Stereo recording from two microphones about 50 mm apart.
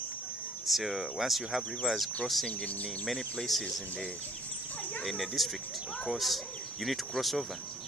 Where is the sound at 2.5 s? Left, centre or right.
Left.